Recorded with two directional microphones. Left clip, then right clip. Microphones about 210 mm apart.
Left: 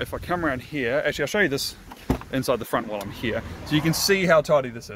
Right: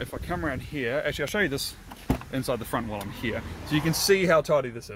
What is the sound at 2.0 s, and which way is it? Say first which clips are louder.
Power windows: left 3 dB; 10° right (ahead or behind).